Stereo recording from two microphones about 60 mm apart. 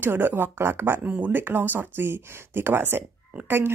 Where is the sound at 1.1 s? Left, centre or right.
Right.